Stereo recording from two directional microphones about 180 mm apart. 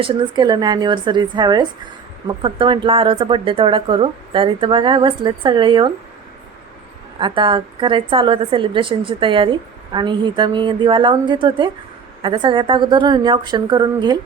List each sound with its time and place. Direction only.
0.0 s a woman's voice: 30° right (ahead or behind)
7.2 s a woman's voice: 25° right (ahead or behind)